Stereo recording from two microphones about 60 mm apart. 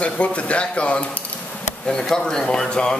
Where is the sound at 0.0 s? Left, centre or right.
Left.